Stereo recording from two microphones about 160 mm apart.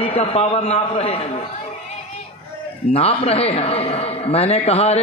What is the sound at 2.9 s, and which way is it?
A man's voice, 40° left (ahead or behind).